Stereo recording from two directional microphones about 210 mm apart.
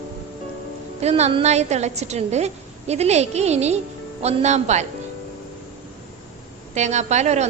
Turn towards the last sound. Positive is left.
turn(degrees=-35)  # may be behind; listen again after turning